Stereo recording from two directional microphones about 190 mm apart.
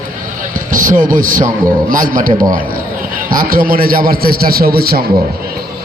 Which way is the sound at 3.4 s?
50° right (ahead or behind).